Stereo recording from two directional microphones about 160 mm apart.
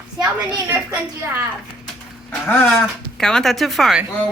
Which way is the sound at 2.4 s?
5° left (ahead or behind).